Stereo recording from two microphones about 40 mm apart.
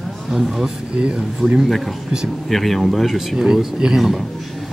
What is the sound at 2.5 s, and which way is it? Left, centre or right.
Speech, centre.